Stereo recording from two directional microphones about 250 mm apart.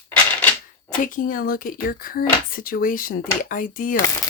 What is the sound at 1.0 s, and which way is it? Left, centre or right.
Speech, left.